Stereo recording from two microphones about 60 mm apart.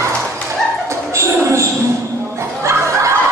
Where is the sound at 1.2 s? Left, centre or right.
Right.